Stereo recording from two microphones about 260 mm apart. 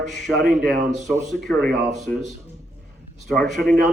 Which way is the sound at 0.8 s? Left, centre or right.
Right.